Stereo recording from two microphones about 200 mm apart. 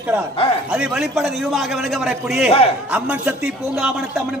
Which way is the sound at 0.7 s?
5° right (ahead or behind).